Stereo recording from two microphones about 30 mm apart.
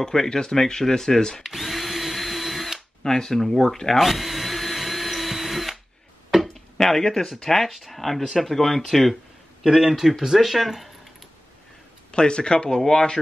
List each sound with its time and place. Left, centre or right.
0.0 s speech: centre
1.4 s drill: centre
3.0 s speech: centre
3.8 s vacuum cleaner: centre
6.4 s speech: centre
9.7 s speech: centre
10.4 s speech: centre
12.1 s speech: left; by 13.0 s centre